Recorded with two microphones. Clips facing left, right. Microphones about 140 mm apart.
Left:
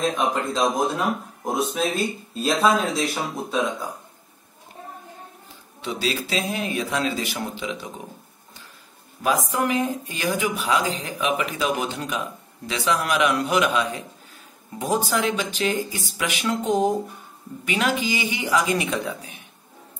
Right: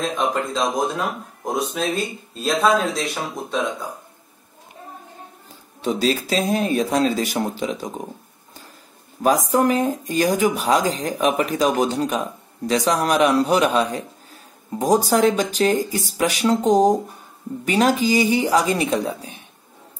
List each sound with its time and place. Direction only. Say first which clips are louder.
0.0 s speech: right 1 dB; centre (ahead or behind)
5.8 s speech: right 6 dB; 40° right (ahead or behind)
9.2 s speech: right 5 dB; 40° right (ahead or behind)